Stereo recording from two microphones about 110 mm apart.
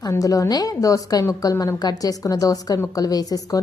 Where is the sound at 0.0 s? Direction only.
30° left (ahead or behind).